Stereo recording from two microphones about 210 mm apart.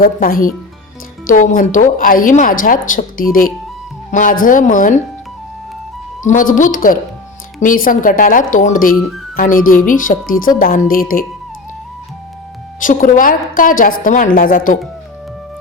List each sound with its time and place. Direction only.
0.0 s a woman's voice: 40° left (ahead or behind)
6.2 s a woman's voice: 40° left (ahead or behind)
9.0 s speech: centre (ahead or behind)
9.3 s a woman's voice: 40° left (ahead or behind)
12.8 s a woman's voice: 40° left (ahead or behind)